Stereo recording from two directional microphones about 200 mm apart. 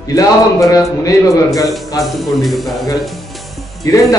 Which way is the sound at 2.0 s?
Centre (ahead or behind).